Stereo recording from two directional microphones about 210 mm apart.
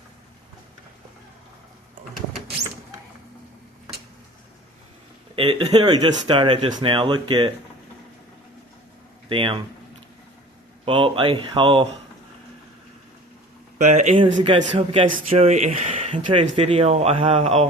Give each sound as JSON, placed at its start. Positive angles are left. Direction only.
{"t": 5.4, "sound": "speech", "side_deg": -25}
{"t": 9.3, "sound": "speech", "side_deg": -25}
{"t": 10.8, "sound": "speech", "side_deg": -25}
{"t": 13.7, "sound": "speech", "side_deg": -35}